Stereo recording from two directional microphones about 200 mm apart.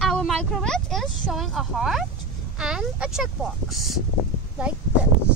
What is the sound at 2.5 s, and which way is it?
Speech, 5° right (ahead or behind).